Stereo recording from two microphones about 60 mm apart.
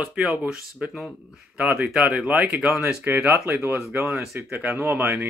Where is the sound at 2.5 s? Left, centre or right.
Centre.